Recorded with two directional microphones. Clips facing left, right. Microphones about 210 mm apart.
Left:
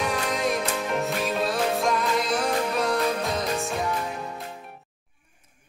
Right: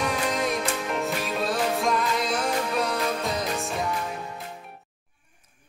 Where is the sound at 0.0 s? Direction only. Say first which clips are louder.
Even; centre (ahead or behind).